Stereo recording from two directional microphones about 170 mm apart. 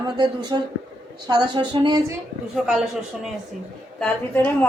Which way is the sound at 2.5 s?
5° right (ahead or behind).